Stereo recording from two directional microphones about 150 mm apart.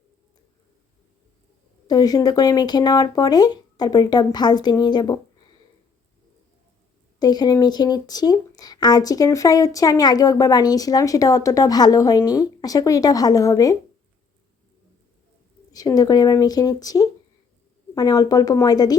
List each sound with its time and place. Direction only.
1.9 s speech: 25° left (ahead or behind)
7.2 s speech: 25° left (ahead or behind)
15.7 s speech: 25° left (ahead or behind)